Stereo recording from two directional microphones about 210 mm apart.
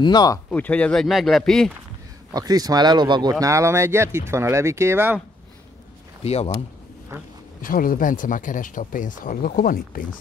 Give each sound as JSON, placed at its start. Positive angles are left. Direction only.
{"t": 0.0, "sound": "speech", "side_deg": 20}
{"t": 0.5, "sound": "speech", "side_deg": 5}
{"t": 2.3, "sound": "speech", "side_deg": -20}
{"t": 6.2, "sound": "speech", "side_deg": 30}
{"t": 7.6, "sound": "speech", "side_deg": 40}